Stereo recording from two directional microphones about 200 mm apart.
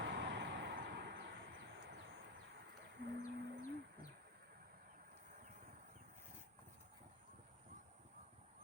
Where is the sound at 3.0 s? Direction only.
55° right (ahead or behind).